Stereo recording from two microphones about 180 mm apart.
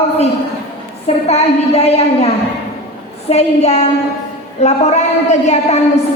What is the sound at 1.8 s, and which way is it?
Speech, 35° left (ahead or behind).